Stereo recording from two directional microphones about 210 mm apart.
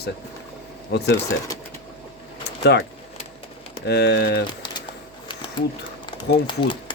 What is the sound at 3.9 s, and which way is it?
Speech, 55° left (ahead or behind).